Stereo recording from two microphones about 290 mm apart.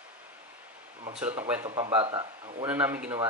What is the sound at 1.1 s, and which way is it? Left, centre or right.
Speech, centre.